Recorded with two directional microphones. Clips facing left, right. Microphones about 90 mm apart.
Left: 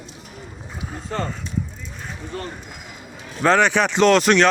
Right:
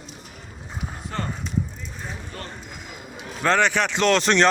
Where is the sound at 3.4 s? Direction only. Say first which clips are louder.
Left 4 dB; 15° left (ahead or behind).